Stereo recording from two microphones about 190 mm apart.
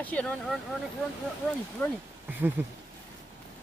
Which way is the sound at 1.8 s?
10° left (ahead or behind).